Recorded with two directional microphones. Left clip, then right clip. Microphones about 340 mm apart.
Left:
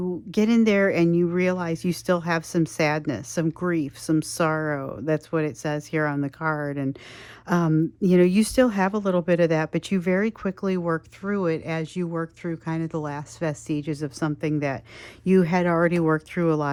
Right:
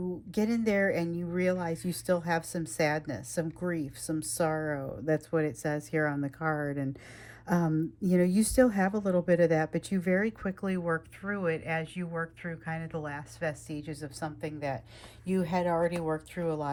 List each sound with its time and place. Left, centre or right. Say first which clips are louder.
0.3 s speech: left 9 dB; centre